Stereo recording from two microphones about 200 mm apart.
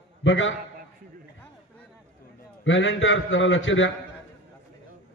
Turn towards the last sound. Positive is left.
turn(degrees=75)  # may be behind; listen again after turning